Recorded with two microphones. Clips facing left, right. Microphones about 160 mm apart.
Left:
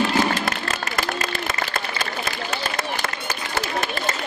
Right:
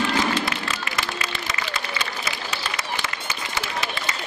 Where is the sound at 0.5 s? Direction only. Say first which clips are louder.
Left 2 dB; 50° left (ahead or behind).